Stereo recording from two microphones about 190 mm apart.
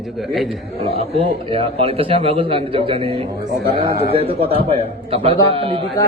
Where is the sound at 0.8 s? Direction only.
30° right (ahead or behind).